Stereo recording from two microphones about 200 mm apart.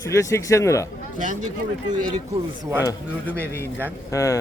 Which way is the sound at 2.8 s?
10° left (ahead or behind).